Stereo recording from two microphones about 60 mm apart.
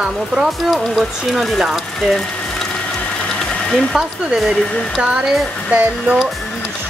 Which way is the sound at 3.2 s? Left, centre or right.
Centre.